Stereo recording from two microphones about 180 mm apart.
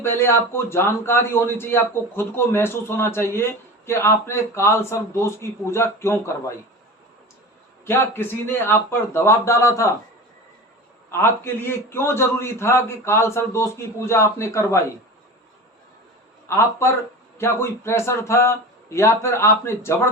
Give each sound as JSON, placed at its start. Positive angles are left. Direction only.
{"t": 0.0, "sound": "a man's voice", "side_deg": 15}
{"t": 7.9, "sound": "a man's voice", "side_deg": 15}
{"t": 11.1, "sound": "a man's voice", "side_deg": 15}
{"t": 16.5, "sound": "a man's voice", "side_deg": 15}